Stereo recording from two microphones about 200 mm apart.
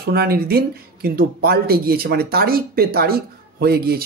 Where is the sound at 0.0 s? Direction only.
50° right (ahead or behind).